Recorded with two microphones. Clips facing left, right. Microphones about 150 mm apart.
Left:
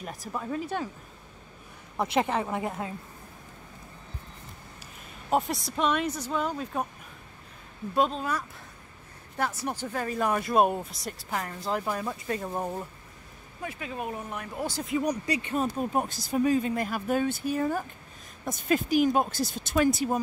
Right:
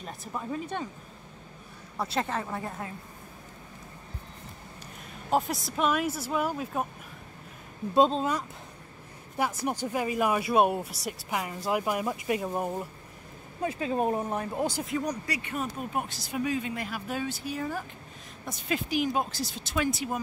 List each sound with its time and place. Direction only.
0.3 s speech: centre (ahead or behind)
2.0 s a woman's voice: 15° left (ahead or behind)
5.3 s speech: centre (ahead or behind)
7.9 s speech: 25° right (ahead or behind)
12.4 s speech: 5° right (ahead or behind)
13.6 s speech: 30° right (ahead or behind)
14.8 s speech: centre (ahead or behind)
15.2 s speech: 25° left (ahead or behind)